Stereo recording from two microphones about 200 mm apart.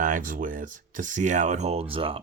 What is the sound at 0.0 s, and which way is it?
Speech, 40° right (ahead or behind).